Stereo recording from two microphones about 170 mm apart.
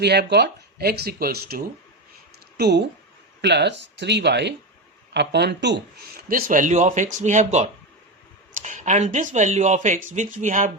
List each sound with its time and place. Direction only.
0.0 s speech: 75° right (ahead or behind)
2.6 s speech: 75° right (ahead or behind)
3.4 s speech: 90° right; by 10.7 s 45° right (ahead or behind)